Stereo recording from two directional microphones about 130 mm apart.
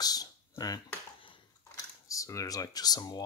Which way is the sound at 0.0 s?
30° left (ahead or behind).